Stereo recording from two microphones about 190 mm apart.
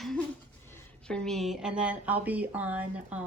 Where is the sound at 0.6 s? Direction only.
10° left (ahead or behind); by 3.2 s 5° right (ahead or behind).